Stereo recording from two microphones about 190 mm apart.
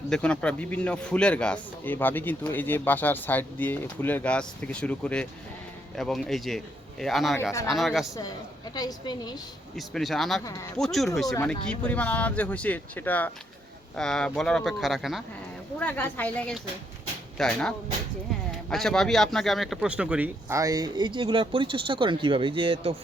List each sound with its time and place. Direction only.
0.1 s a man's voice: 5° left (ahead or behind)
8.7 s a woman's voice: 20° left (ahead or behind)
9.7 s speech: centre (ahead or behind)
10.4 s a man's voice: 20° left (ahead or behind)
10.8 s a man's voice: centre (ahead or behind)
15.8 s a man's voice: 10° left (ahead or behind); by 23.0 s 30° right (ahead or behind)